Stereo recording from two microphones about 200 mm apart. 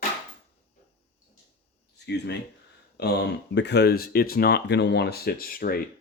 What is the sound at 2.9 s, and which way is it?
Speech, 55° left (ahead or behind).